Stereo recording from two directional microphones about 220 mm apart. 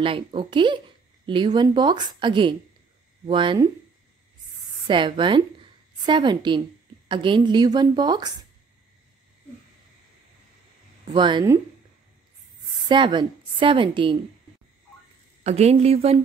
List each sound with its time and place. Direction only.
0.0 s a woman's voice: 25° right (ahead or behind)
4.8 s a woman's voice: 20° right (ahead or behind)
11.1 s a woman's voice: 20° right (ahead or behind)
12.8 s a woman's voice: 20° right (ahead or behind)
15.4 s a woman's voice: 30° right (ahead or behind)